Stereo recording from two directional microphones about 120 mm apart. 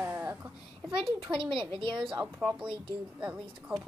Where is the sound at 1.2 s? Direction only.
45° right (ahead or behind).